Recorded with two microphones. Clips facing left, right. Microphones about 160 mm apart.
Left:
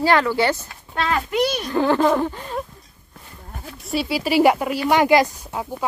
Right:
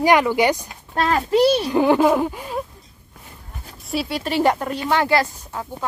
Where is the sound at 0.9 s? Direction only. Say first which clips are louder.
Right 4 dB; 35° right (ahead or behind).